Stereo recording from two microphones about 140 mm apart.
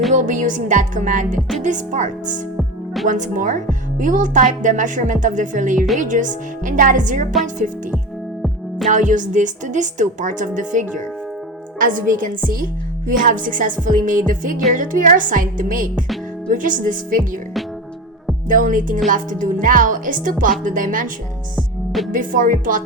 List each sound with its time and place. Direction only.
0.1 s speech: 65° right (ahead or behind)
2.6 s music: centre (ahead or behind)
3.1 s speech: 65° right (ahead or behind)
8.9 s speech: 65° right (ahead or behind)
18.4 s speech: 70° right (ahead or behind)
21.5 s music: centre (ahead or behind)
22.1 s speech: 75° right (ahead or behind)